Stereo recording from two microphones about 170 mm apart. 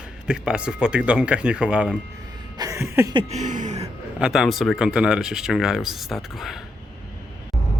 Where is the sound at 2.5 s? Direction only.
20° right (ahead or behind).